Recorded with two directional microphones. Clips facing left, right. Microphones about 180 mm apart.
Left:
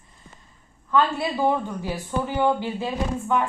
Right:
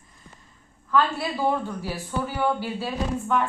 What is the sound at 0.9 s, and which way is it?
A man's voice, 20° left (ahead or behind).